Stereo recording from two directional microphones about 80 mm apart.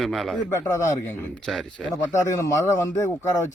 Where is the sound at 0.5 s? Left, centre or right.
Left.